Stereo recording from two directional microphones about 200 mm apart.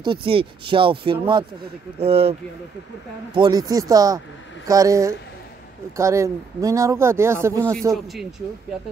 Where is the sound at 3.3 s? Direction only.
20° right (ahead or behind).